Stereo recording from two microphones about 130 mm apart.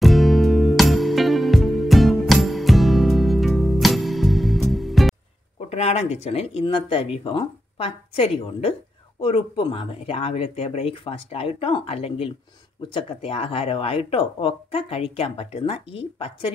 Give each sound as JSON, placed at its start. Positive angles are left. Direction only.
{"t": 0.0, "sound": "music", "side_deg": 0}
{"t": 5.7, "sound": "speech", "side_deg": 55}